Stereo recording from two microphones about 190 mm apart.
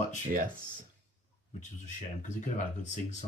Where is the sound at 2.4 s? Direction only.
40° left (ahead or behind).